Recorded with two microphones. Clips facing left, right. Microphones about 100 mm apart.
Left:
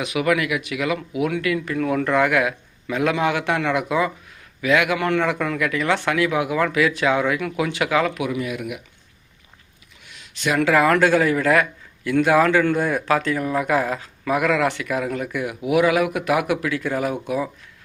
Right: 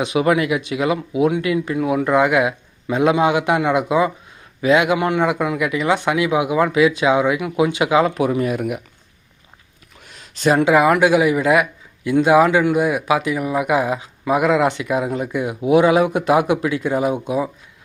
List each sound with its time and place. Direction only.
0.0 s a man's voice: 25° right (ahead or behind)
8.2 s speech: 40° right (ahead or behind)
10.0 s a sound: 40° right (ahead or behind)
10.6 s a man's voice: 20° right (ahead or behind)